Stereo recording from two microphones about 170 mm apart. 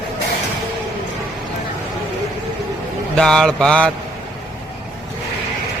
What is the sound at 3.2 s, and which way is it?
Speech, 5° left (ahead or behind).